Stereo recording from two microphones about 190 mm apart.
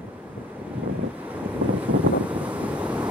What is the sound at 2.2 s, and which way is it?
Wind, 5° right (ahead or behind).